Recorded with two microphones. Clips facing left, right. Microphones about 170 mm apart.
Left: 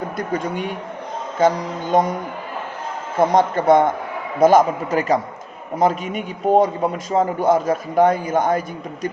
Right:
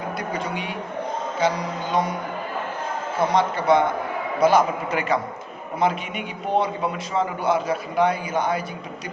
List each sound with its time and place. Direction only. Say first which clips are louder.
0.2 s a man's voice: left 8 dB; 50° left (ahead or behind)
3.2 s a man's voice: left 5 dB; 50° left (ahead or behind)